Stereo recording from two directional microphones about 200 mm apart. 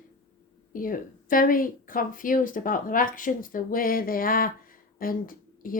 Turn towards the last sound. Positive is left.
turn(degrees=45)  # may be behind; listen again after turning